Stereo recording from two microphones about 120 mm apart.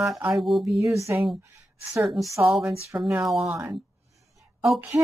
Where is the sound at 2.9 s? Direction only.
20° right (ahead or behind).